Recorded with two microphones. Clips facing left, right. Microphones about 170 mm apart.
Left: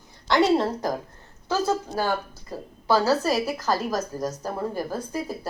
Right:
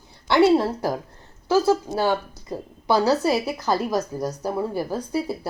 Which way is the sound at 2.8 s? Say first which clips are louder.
Right 2 dB; 15° right (ahead or behind).